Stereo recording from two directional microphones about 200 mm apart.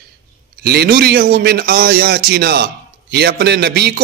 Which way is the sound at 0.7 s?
55° right (ahead or behind).